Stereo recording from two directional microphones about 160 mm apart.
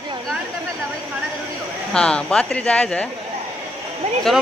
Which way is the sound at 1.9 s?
5° left (ahead or behind).